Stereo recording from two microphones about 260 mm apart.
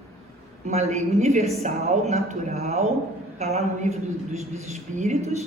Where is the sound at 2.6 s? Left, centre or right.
Right.